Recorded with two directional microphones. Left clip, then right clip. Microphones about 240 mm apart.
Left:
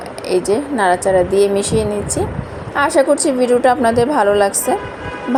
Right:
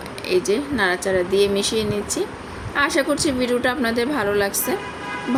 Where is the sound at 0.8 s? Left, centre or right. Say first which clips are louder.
Left 8 dB; centre.